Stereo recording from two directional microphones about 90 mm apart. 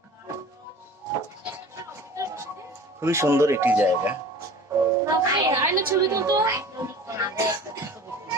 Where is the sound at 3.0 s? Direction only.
30° right (ahead or behind).